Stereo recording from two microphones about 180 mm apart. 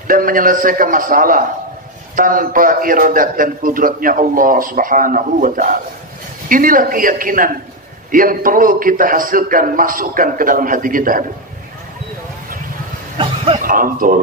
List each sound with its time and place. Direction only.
0.1 s a man's voice: 50° right (ahead or behind)
13.6 s speech: 50° right (ahead or behind)